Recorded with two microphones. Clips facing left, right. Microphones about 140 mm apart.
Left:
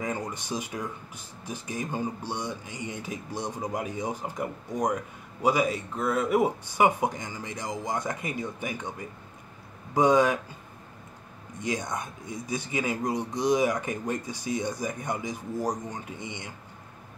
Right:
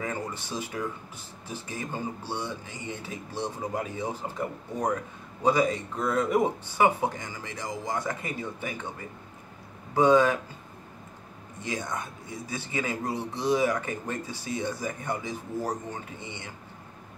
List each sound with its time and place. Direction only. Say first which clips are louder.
0.0 s a sound: left 1 dB; 15° left (ahead or behind)
1.5 s a man's voice: left 2 dB; 15° left (ahead or behind)
9.9 s a man's voice: right 1 dB; 15° left (ahead or behind)
11.6 s a man's voice: left 2 dB; 15° left (ahead or behind)